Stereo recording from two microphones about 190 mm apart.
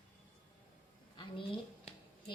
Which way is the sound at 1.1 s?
25° left (ahead or behind).